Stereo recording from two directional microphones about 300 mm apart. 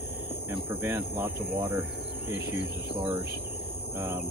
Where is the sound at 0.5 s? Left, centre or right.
Centre.